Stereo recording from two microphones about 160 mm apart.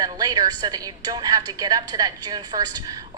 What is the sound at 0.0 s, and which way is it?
A woman's voice, 25° right (ahead or behind).